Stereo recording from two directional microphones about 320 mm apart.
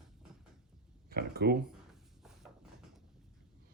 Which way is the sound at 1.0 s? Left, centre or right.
Right.